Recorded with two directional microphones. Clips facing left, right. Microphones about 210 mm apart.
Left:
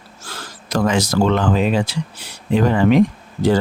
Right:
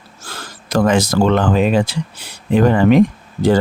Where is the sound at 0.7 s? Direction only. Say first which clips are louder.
Right 3 dB; 55° right (ahead or behind).